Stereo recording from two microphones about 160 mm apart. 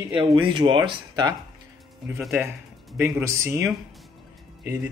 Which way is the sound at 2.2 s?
10° right (ahead or behind).